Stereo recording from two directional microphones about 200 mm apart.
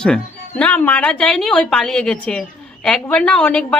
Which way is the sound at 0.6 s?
5° left (ahead or behind).